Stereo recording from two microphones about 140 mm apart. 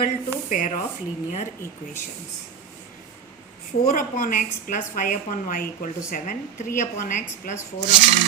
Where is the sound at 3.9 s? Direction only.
70° left (ahead or behind).